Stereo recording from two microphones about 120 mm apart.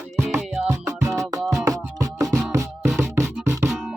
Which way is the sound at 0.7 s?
25° right (ahead or behind).